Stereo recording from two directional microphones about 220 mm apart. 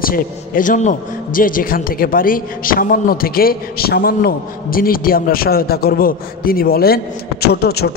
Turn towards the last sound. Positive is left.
turn(degrees=45)  # may be behind; listen again after turning